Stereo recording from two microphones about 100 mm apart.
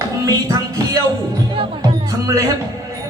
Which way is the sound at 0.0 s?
35° right (ahead or behind).